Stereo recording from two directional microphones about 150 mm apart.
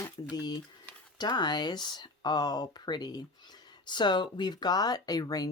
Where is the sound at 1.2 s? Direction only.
30° left (ahead or behind).